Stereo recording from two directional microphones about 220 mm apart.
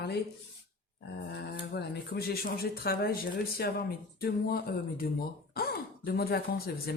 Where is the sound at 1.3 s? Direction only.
45° left (ahead or behind).